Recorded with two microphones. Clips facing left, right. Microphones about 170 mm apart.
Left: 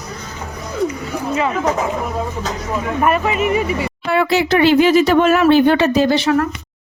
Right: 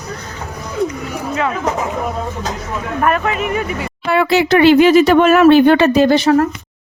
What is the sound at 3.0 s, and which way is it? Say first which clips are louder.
Speech: even; 5° left (ahead or behind).